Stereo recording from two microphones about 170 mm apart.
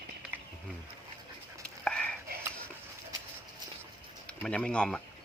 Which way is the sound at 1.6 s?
5° left (ahead or behind).